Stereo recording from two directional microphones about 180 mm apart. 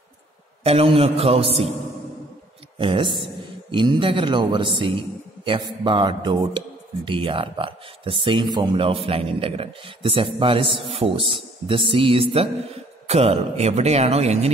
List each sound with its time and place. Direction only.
0.7 s a man's voice: 35° right (ahead or behind)
2.8 s a man's voice: 25° right (ahead or behind)